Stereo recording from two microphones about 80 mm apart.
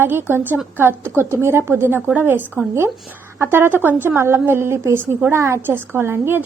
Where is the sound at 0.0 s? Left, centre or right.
Right.